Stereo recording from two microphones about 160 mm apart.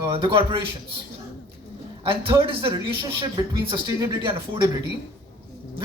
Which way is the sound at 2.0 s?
35° right (ahead or behind).